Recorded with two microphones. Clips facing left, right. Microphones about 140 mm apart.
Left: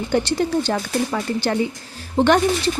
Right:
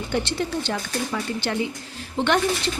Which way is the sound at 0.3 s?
40° left (ahead or behind).